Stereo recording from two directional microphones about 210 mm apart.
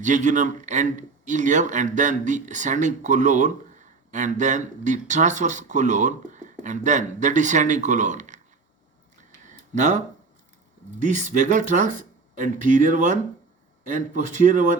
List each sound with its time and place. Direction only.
0.0 s a man's voice: 35° right (ahead or behind)
9.5 s a sound: 35° right (ahead or behind)
11.0 s a man's voice: 35° right (ahead or behind)